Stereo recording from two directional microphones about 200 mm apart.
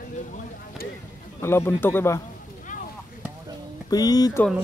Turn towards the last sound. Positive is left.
turn(degrees=20)  # may be behind; listen again after turning